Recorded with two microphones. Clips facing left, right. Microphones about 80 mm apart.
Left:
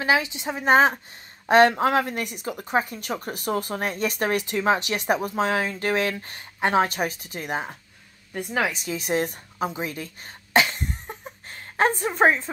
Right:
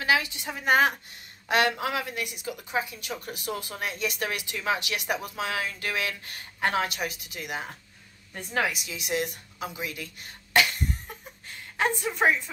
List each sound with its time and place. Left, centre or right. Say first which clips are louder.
0.0 s a woman's voice: left 3 dB; left
8.3 s speech: left 3 dB; centre
8.7 s a woman's voice: left 5 dB; left